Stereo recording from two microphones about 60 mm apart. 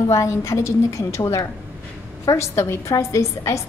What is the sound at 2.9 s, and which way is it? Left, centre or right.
Speech, left.